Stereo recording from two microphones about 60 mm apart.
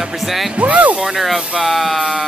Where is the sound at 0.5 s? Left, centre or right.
Right.